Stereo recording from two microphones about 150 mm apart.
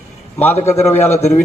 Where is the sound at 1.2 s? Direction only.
45° left (ahead or behind).